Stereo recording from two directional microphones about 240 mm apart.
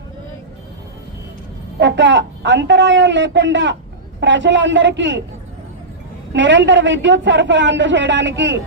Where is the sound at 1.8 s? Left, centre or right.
Right.